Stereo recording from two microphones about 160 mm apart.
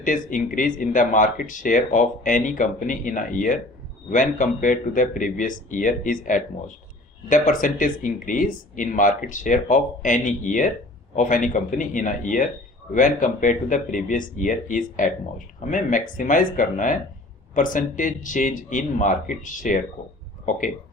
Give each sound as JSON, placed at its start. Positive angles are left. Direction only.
{"t": 0.0, "sound": "speech", "side_deg": 55}